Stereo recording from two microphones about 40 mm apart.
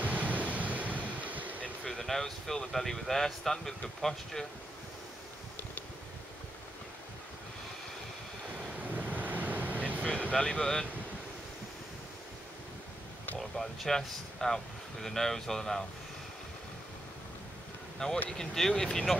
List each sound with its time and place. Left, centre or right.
0.0 s waves: right
1.9 s speech: centre
8.9 s vehicle: right
10.3 s speech: centre
13.4 s speech: centre
17.9 s speech: centre